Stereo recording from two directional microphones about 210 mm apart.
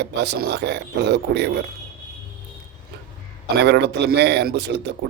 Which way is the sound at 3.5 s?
55° right (ahead or behind).